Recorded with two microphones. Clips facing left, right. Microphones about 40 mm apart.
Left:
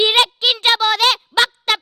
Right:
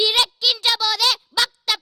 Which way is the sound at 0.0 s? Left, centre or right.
Left.